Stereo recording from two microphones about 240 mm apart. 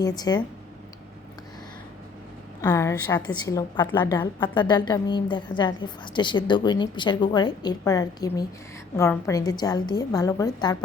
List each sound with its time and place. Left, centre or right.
0.0 s a woman's voice: centre
2.6 s a woman's voice: centre